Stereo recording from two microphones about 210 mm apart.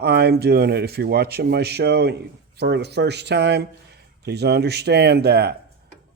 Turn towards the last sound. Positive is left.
turn(degrees=-50)  # may be behind; listen again after turning